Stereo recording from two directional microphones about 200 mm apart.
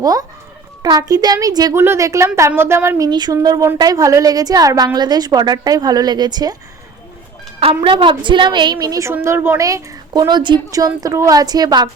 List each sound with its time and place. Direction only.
0.0 s a woman's voice: 20° right (ahead or behind)
7.6 s a woman's voice: 25° right (ahead or behind)